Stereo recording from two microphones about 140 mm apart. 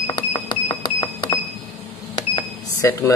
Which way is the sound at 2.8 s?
25° left (ahead or behind).